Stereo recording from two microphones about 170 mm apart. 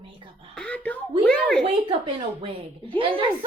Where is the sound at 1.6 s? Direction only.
30° right (ahead or behind).